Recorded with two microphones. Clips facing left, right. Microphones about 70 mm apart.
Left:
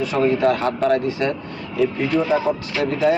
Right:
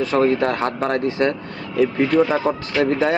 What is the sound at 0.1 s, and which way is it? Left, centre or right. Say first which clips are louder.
Speech: left 1 dB; right.